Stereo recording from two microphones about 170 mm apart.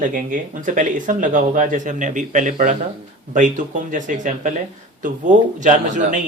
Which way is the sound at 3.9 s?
50° right (ahead or behind).